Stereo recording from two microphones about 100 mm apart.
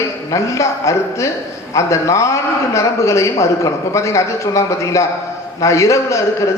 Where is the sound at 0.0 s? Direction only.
30° left (ahead or behind).